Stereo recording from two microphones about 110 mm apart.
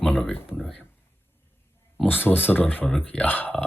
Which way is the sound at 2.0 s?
15° left (ahead or behind).